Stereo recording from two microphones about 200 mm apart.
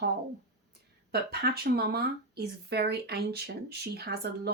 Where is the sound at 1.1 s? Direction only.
55° right (ahead or behind).